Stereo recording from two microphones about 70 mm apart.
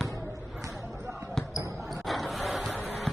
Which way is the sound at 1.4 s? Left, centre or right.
Centre.